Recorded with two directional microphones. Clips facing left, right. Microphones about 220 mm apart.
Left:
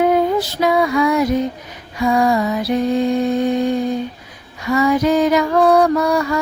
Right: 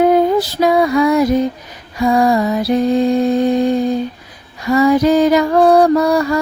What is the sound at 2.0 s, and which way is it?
Music, 35° right (ahead or behind).